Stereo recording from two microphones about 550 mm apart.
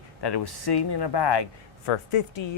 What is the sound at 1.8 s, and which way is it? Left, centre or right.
Speech, left.